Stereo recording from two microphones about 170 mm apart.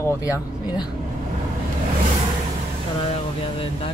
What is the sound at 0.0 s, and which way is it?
Speech, 15° left (ahead or behind).